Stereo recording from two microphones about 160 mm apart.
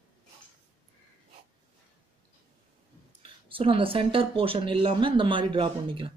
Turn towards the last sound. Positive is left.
turn(degrees=-35)  # may be behind; listen again after turning